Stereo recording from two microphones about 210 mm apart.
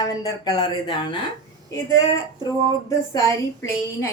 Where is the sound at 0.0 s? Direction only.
20° left (ahead or behind).